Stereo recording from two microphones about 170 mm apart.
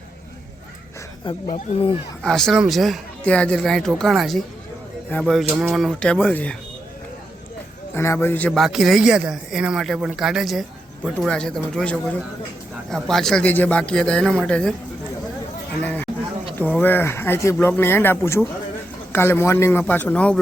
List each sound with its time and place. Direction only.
1.2 s speech: 25° left (ahead or behind)
2.2 s speech: 5° left (ahead or behind)
7.9 s speech: 15° left (ahead or behind)
16.6 s a man's voice: 10° left (ahead or behind)